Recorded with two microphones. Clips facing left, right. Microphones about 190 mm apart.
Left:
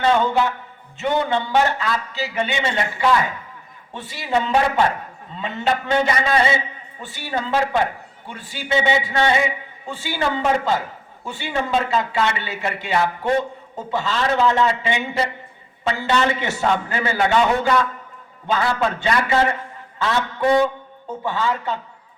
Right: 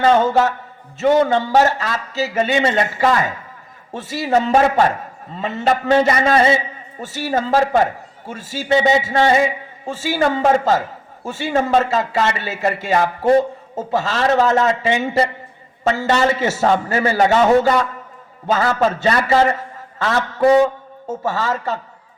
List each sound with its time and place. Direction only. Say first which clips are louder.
0.0 s a man's voice: right 4 dB; 40° right (ahead or behind)
15.9 s a man's voice: right 4 dB; 40° right (ahead or behind)
20.4 s a man's voice: right 5 dB; 35° right (ahead or behind)